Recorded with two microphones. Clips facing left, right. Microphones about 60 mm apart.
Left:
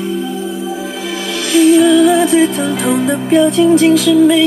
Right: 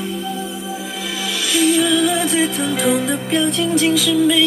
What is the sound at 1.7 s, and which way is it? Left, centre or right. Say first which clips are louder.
Music: left 10 dB; left.